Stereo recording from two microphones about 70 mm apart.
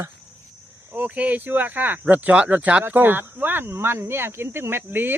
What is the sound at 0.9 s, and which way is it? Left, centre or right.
Speech, right.